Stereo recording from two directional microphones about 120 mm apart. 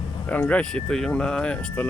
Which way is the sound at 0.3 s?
15° left (ahead or behind).